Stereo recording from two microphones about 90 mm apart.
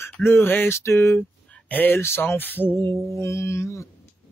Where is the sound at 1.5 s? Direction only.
20° left (ahead or behind).